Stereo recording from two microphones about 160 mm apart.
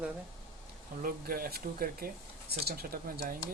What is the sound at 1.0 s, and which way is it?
Speech, 65° right (ahead or behind).